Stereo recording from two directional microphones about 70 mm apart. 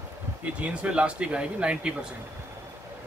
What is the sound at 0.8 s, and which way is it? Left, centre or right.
Speech, centre.